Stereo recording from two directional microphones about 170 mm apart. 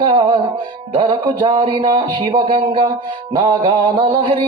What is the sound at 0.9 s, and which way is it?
Music, 30° right (ahead or behind).